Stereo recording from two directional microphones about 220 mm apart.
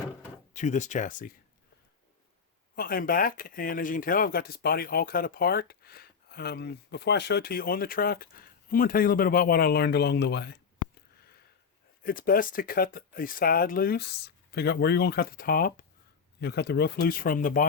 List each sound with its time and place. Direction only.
0.5 s speech: 35° left (ahead or behind)
2.7 s speech: 40° left (ahead or behind)
12.0 s speech: 40° left (ahead or behind)